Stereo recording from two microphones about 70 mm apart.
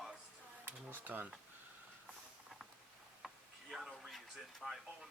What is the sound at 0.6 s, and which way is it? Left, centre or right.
Speech, right.